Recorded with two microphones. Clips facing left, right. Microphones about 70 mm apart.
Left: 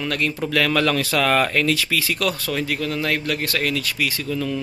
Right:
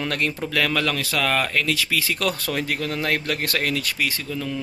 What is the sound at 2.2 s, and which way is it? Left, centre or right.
Speech, right.